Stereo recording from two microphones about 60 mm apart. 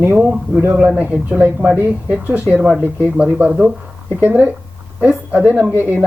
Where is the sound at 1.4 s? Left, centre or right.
Centre.